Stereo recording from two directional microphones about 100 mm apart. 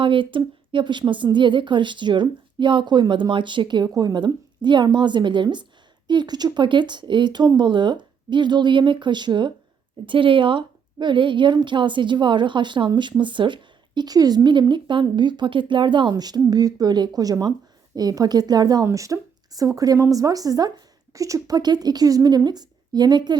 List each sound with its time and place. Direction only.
0.0 s a woman's voice: 55° right (ahead or behind)